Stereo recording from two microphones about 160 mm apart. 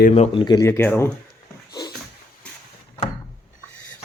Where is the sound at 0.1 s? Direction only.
40° left (ahead or behind).